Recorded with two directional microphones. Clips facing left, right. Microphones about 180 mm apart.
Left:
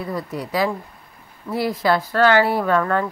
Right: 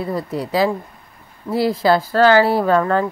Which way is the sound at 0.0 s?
25° right (ahead or behind).